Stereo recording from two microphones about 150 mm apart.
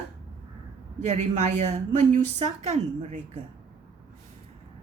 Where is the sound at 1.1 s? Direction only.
50° right (ahead or behind).